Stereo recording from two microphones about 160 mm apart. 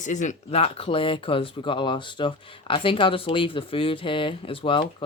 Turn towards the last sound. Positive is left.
turn(degrees=35)  # may be behind; listen again after turning